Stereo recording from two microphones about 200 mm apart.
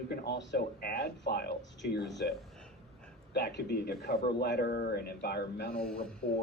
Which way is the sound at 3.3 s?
50° left (ahead or behind).